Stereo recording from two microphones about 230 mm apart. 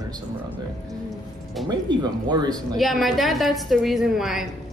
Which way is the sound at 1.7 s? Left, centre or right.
Centre.